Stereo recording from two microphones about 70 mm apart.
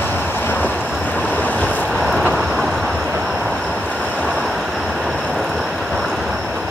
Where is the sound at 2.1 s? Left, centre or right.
Centre.